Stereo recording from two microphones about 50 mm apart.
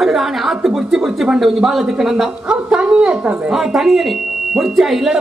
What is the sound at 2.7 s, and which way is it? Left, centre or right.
Speech, right.